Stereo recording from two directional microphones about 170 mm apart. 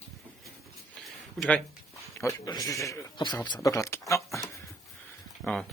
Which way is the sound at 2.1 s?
20° left (ahead or behind).